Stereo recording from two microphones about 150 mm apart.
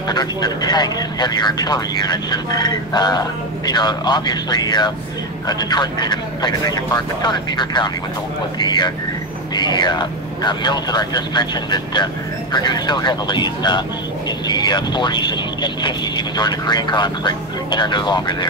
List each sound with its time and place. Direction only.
0.1 s speech: 25° left (ahead or behind)